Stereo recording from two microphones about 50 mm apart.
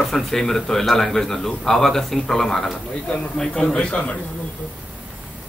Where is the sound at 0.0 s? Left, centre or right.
Centre.